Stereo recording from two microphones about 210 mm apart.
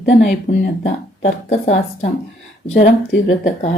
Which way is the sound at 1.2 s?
35° left (ahead or behind).